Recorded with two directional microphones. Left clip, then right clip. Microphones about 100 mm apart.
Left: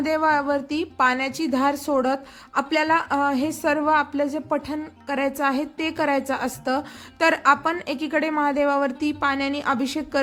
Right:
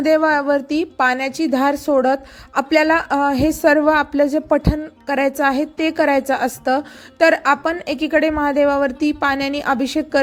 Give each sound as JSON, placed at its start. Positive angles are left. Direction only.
{"t": 0.0, "sound": "a woman's voice", "side_deg": -45}